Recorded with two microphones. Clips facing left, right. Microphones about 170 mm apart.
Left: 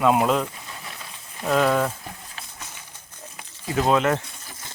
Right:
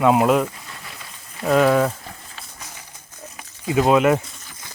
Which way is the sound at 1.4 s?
Centre (ahead or behind).